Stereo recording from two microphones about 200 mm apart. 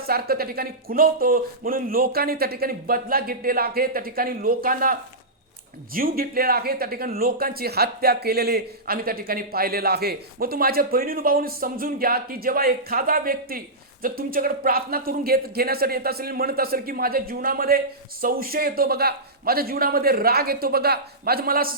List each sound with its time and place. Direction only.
0.1 s speech: 50° right (ahead or behind)